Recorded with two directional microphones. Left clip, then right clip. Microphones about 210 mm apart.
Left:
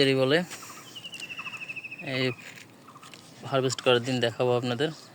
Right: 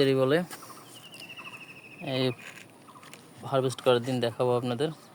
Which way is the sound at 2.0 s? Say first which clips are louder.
Even; 15° right (ahead or behind).